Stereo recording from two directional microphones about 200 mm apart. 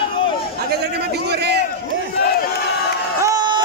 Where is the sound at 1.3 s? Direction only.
55° right (ahead or behind).